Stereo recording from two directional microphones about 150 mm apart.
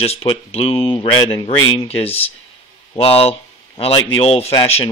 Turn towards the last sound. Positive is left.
turn(degrees=35)  # may be behind; listen again after turning